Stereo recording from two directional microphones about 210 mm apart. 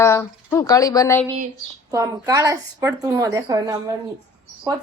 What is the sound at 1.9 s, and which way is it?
Speech, 15° right (ahead or behind).